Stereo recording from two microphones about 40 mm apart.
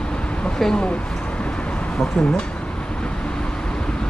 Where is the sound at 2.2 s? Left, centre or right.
Left.